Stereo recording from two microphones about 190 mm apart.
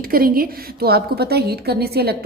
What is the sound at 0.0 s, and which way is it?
A woman's voice, 50° right (ahead or behind).